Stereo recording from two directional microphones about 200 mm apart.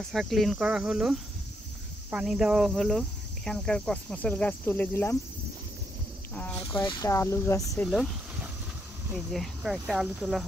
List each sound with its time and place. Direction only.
0.0 s speech: centre (ahead or behind)
6.6 s speech: 20° left (ahead or behind)
7.8 s speech: centre (ahead or behind)